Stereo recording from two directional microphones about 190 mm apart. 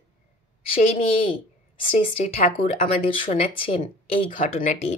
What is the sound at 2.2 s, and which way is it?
Speech, 35° left (ahead or behind).